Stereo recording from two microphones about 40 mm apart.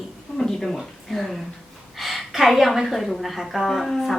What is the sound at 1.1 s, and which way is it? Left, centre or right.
A woman's voice, centre.